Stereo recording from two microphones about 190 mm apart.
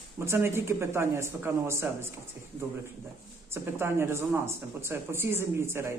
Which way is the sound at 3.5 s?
15° right (ahead or behind).